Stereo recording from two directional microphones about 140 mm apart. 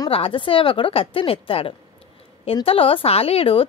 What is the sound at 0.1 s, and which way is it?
Speech, 40° left (ahead or behind).